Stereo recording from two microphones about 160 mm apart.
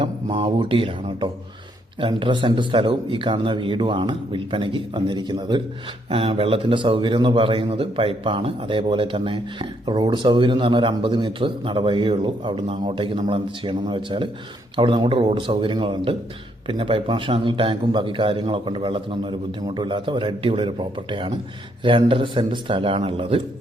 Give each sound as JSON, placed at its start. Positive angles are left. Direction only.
{"t": 0.0, "sound": "a man's voice", "side_deg": -35}